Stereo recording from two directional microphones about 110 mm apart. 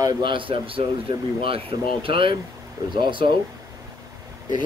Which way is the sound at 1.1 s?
40° right (ahead or behind).